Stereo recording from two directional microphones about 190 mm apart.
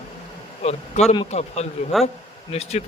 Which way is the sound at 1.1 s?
35° left (ahead or behind).